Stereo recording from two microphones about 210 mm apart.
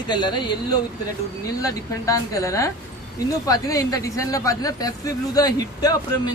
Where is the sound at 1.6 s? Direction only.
15° left (ahead or behind).